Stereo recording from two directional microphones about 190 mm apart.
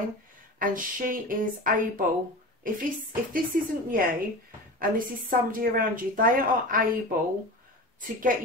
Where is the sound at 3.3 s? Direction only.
45° right (ahead or behind).